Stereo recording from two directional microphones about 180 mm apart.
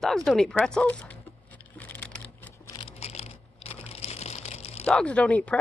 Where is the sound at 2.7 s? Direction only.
30° left (ahead or behind).